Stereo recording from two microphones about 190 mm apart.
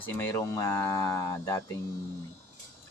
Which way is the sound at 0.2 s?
15° left (ahead or behind).